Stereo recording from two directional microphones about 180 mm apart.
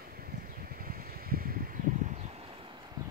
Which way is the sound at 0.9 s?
55° right (ahead or behind).